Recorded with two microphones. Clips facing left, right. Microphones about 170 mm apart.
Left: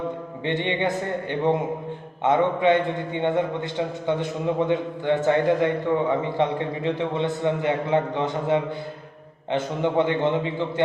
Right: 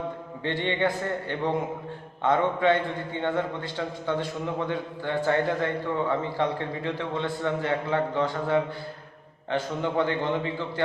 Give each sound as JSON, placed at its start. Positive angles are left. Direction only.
{"t": 0.4, "sound": "a man's voice", "side_deg": 20}